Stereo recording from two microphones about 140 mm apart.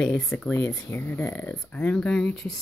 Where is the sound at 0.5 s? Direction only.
20° left (ahead or behind).